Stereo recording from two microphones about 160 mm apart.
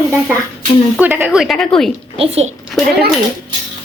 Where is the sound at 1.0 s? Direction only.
10° right (ahead or behind).